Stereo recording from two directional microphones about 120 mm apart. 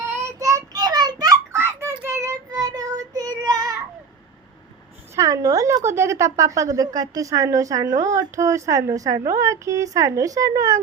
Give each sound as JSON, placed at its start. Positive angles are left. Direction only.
{"t": 0.2, "sound": "child singing", "side_deg": -25}
{"t": 5.1, "sound": "a woman's voice", "side_deg": -30}